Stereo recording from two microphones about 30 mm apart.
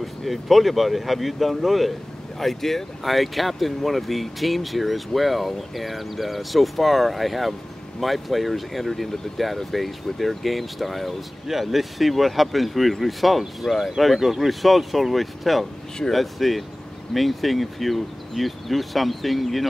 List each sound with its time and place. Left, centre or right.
0.0 s speech: centre
2.3 s speech: centre